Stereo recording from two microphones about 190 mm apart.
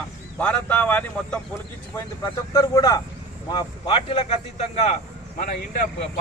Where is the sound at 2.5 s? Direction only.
20° left (ahead or behind).